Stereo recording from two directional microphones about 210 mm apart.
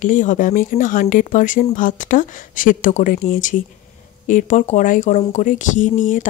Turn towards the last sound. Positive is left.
turn(degrees=35)  # may be behind; listen again after turning